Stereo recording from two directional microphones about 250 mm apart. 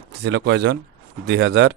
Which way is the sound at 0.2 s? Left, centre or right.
Right.